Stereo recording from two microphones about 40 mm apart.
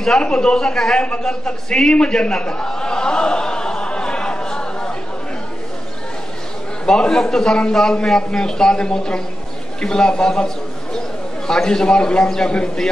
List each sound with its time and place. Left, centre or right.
0.2 s speech: left
1.2 s a sound: centre
6.9 s a man's voice: centre